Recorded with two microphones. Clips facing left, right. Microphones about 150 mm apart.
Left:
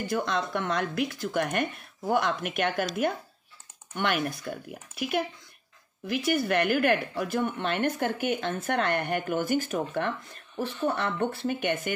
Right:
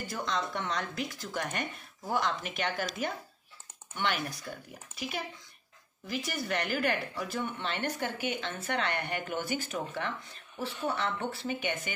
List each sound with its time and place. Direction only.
0.0 s speech: 60° left (ahead or behind)